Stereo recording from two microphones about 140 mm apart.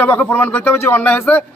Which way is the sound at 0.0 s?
10° left (ahead or behind).